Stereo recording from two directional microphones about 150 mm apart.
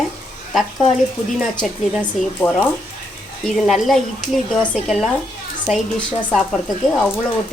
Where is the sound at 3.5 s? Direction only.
Centre (ahead or behind).